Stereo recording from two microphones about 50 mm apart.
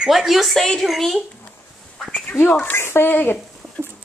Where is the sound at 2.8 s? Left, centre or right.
Left.